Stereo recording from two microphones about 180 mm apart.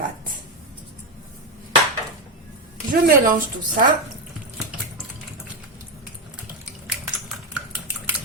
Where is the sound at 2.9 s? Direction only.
50° right (ahead or behind).